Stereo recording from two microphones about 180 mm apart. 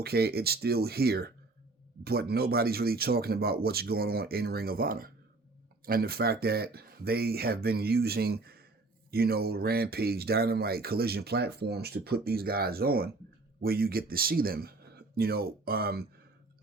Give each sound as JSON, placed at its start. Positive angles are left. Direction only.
{"t": 0.0, "sound": "speech", "side_deg": -60}